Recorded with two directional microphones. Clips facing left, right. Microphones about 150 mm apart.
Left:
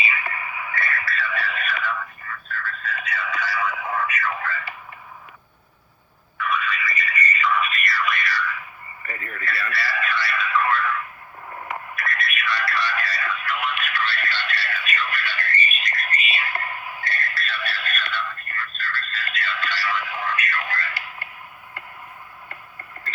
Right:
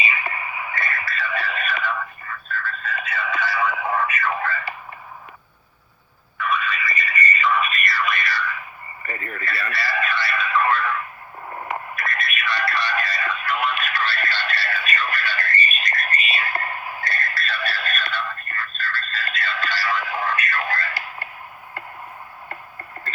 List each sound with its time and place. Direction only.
0.0 s radio: 20° right (ahead or behind)
3.0 s a sound: 25° right (ahead or behind)
6.4 s music: 25° right (ahead or behind)
9.0 s radio: 35° right (ahead or behind)
9.4 s a sound: 25° right (ahead or behind)
12.5 s music: 20° right (ahead or behind)